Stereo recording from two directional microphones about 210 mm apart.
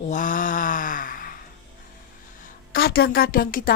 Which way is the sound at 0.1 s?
40° left (ahead or behind).